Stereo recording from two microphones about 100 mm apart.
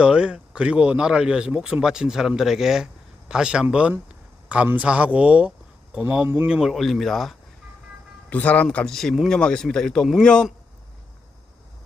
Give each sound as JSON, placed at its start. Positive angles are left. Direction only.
{"t": 0.0, "sound": "speech", "side_deg": -10}
{"t": 6.2, "sound": "speech", "side_deg": -25}
{"t": 6.5, "sound": "speech", "side_deg": -5}
{"t": 8.3, "sound": "speech", "side_deg": 15}